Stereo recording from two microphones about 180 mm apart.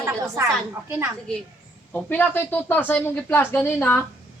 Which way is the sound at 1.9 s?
10° left (ahead or behind).